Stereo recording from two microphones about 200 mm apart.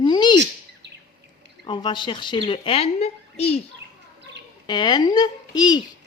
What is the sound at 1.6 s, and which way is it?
A woman's voice, 25° left (ahead or behind).